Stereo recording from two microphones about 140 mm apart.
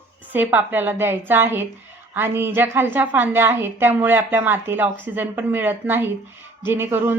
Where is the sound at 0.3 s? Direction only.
15° right (ahead or behind).